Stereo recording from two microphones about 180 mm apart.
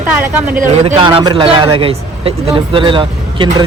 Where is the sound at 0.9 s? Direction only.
25° right (ahead or behind).